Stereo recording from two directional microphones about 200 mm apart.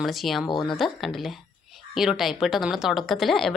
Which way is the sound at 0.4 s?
20° left (ahead or behind).